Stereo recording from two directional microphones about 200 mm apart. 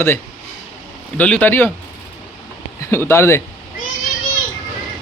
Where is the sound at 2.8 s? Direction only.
10° left (ahead or behind).